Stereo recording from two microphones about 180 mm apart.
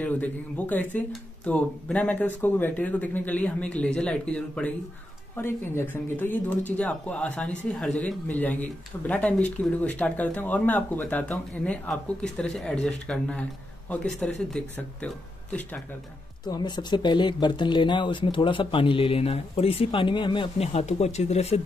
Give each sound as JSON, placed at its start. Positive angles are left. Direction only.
{"t": 0.0, "sound": "speech", "side_deg": 10}
{"t": 16.4, "sound": "speech", "side_deg": 25}